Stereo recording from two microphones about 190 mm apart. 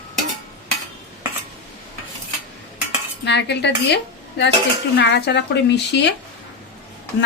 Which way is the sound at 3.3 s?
65° left (ahead or behind).